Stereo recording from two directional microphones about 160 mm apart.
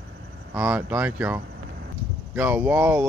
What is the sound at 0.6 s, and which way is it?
Speech, 10° right (ahead or behind).